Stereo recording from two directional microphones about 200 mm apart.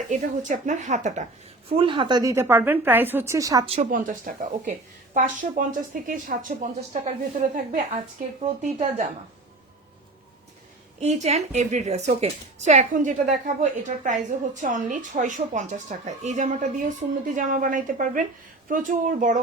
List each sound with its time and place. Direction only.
0.1 s a woman's voice: 35° right (ahead or behind)
1.7 s a woman's voice: 25° right (ahead or behind)
3.8 s a woman's voice: 40° right (ahead or behind)
11.0 s a woman's voice: 35° right (ahead or behind)